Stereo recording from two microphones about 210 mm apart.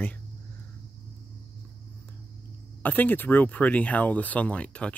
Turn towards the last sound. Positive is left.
turn(degrees=5)  # may be behind; listen again after turning